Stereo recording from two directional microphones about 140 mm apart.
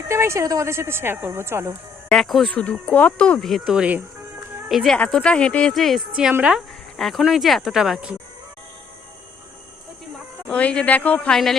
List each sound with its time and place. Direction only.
0.1 s speech: 20° right (ahead or behind)
2.0 s a woman's voice: 5° left (ahead or behind)
10.5 s speech: 10° left (ahead or behind)